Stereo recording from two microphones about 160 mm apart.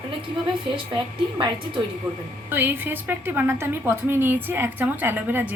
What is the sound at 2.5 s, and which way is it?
A woman's voice, 15° right (ahead or behind).